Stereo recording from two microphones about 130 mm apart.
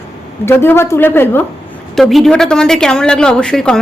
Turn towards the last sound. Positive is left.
turn(degrees=5)  # may be behind; listen again after turning